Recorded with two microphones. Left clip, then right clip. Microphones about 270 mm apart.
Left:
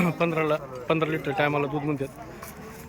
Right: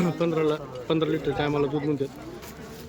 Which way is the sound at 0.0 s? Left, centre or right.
Centre.